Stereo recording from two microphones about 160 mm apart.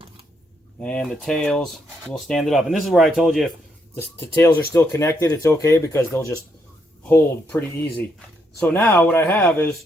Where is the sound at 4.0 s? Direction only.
15° left (ahead or behind).